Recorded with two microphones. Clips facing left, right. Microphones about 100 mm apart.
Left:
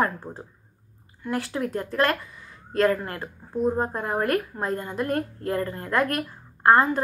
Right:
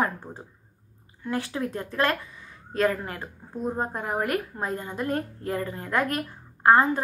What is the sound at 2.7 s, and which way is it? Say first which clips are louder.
A woman's voice: left 3 dB; 15° right (ahead or behind).